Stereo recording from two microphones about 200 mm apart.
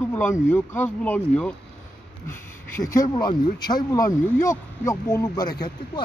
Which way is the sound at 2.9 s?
20° left (ahead or behind).